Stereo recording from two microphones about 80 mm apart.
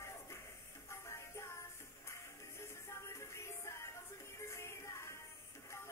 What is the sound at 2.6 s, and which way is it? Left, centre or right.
Music, left.